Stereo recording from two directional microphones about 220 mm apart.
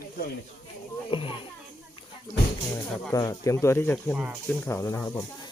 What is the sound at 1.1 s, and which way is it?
Speech, 25° left (ahead or behind).